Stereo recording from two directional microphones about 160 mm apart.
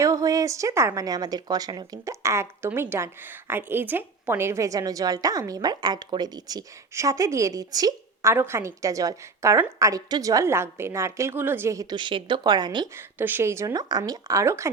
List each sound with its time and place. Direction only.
0.0 s a woman's voice: 20° right (ahead or behind)
13.0 s speech: 15° right (ahead or behind)